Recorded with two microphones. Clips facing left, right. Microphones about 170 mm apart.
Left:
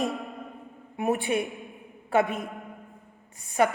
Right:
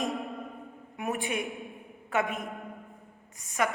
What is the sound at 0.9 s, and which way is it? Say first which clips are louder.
A woman's voice: left 6 dB; 35° left (ahead or behind).